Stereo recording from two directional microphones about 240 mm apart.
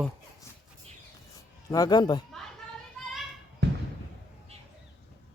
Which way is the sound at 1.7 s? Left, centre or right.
Centre.